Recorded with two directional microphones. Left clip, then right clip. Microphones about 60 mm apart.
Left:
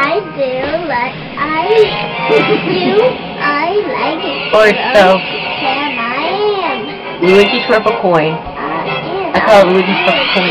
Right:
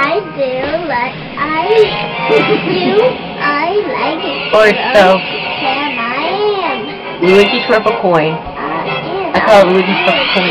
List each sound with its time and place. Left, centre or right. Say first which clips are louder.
0.0 s child singing: even; right
9.3 s speech: even; right